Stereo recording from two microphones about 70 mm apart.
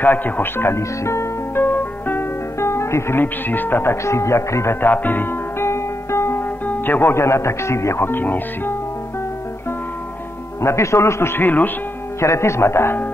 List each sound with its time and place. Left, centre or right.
0.0 s speech: left
1.6 s music: left
2.6 s speech: left
4.8 s speech: left
10.6 s speech: left
12.2 s speech: left